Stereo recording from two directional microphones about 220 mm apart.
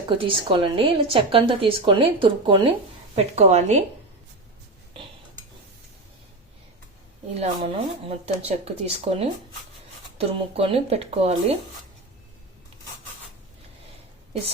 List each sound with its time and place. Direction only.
0.1 s a woman's voice: 25° right (ahead or behind)
7.3 s a woman's voice: 25° right (ahead or behind)